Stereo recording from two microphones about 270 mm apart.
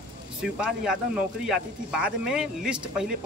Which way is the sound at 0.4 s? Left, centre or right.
Centre.